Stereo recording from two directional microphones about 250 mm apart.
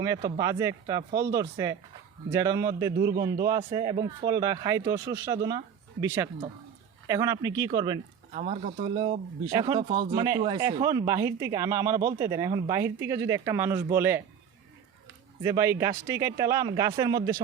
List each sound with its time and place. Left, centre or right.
0.3 s speech: centre
8.3 s speech: right; by 14.2 s centre
15.4 s speech: centre